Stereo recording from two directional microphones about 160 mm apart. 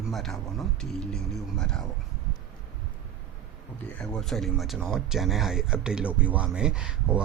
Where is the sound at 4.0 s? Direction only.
Centre (ahead or behind).